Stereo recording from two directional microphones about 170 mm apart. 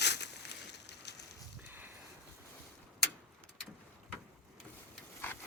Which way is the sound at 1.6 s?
10° right (ahead or behind).